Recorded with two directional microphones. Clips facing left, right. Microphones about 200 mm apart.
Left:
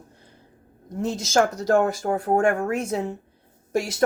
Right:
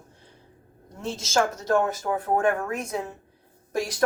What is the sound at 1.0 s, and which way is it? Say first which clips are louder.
A woman's voice: left 4 dB; 40° left (ahead or behind).